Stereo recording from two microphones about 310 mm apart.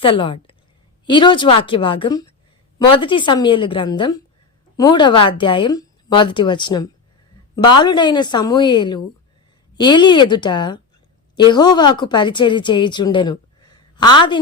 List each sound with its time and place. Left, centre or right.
0.0 s a woman's voice: centre